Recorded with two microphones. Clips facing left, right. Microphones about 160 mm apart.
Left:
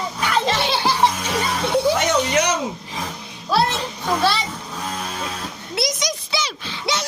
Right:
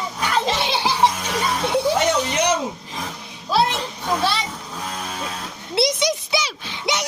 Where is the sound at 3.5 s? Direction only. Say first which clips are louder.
Even; 15° right (ahead or behind).